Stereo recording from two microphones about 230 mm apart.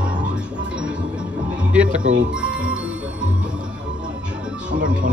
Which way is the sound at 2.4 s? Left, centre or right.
Centre.